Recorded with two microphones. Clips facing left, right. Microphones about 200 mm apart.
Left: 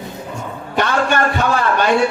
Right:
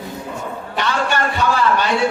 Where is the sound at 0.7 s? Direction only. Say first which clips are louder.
Left 4 dB; 50° left (ahead or behind).